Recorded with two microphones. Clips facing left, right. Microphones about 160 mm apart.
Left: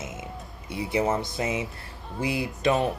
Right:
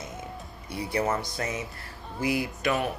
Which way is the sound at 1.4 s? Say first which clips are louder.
Left 4 dB; 10° left (ahead or behind).